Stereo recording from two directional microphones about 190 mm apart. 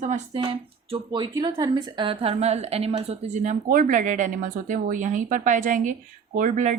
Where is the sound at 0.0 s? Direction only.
35° right (ahead or behind).